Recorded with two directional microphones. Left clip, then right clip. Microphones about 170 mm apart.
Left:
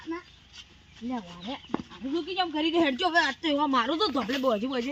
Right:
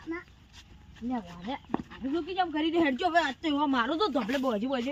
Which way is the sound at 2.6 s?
30° right (ahead or behind).